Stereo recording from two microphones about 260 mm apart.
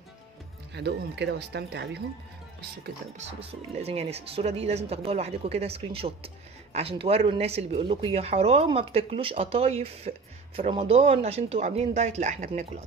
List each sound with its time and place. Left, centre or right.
0.7 s speech: right
3.2 s speech: right